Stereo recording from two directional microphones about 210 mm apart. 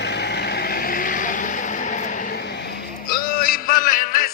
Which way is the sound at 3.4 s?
45° left (ahead or behind).